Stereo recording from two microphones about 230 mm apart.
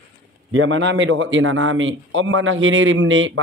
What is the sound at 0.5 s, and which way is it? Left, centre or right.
A man's voice, right.